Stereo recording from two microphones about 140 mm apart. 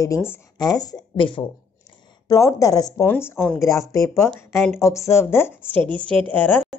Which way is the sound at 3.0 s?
15° left (ahead or behind).